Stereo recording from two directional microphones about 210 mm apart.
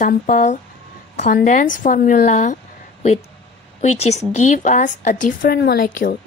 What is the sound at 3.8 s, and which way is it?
A woman's voice, 30° left (ahead or behind).